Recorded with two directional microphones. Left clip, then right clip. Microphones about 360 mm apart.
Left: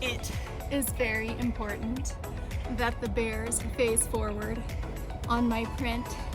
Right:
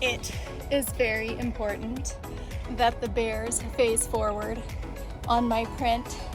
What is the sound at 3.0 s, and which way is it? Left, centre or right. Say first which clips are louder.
Speech: right 3 dB; centre.